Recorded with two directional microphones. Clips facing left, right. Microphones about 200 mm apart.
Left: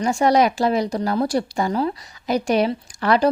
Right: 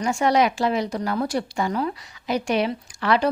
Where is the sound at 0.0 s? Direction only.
35° left (ahead or behind).